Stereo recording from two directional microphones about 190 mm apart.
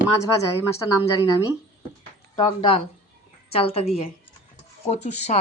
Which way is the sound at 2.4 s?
25° left (ahead or behind).